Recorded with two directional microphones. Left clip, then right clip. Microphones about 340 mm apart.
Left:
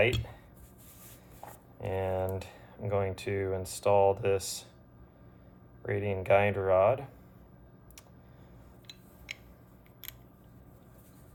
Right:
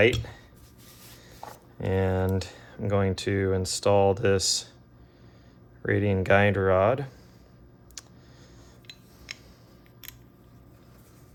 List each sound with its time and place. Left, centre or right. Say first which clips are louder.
0.0 s speech: right 6 dB; right
1.8 s speech: right 5 dB; right
5.8 s speech: right 7 dB; right
8.0 s a sound: right 11 dB; right